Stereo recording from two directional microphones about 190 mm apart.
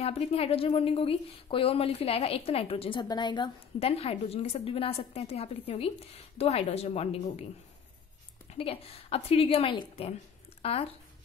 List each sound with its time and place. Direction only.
0.0 s speech: 30° left (ahead or behind)
8.5 s speech: 30° left (ahead or behind)